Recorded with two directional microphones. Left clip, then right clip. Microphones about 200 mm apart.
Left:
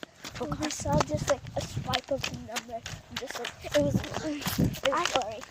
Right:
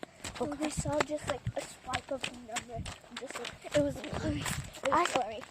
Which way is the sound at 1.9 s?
35° left (ahead or behind).